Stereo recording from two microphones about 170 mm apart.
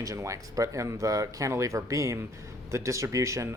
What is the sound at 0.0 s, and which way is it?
Speech, 20° right (ahead or behind).